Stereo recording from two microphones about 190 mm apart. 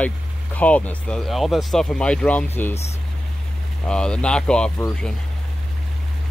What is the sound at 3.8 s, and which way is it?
Speech, 5° left (ahead or behind).